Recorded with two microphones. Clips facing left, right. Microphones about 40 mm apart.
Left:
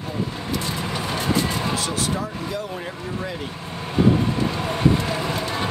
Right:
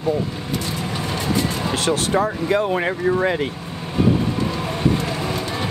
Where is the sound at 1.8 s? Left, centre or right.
Right.